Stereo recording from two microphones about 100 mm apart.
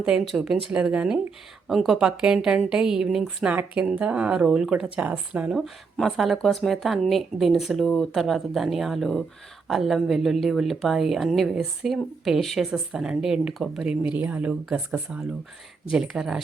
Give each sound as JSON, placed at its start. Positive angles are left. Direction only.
{"t": 0.0, "sound": "speech", "side_deg": -10}
{"t": 3.5, "sound": "speech", "side_deg": -15}